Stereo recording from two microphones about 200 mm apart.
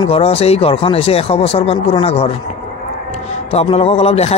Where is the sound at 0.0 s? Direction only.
30° left (ahead or behind).